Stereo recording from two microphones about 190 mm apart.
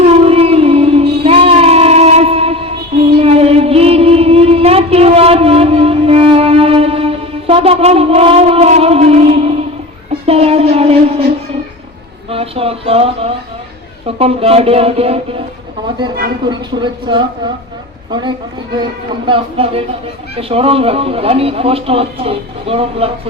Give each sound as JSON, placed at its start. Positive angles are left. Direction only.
{"t": 0.0, "sound": "music", "side_deg": -30}
{"t": 10.2, "sound": "a sound", "side_deg": -30}
{"t": 12.3, "sound": "speech", "side_deg": -30}
{"t": 16.5, "sound": "speech", "side_deg": -25}